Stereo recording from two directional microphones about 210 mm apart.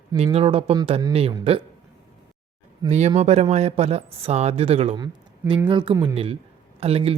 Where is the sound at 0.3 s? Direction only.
25° right (ahead or behind).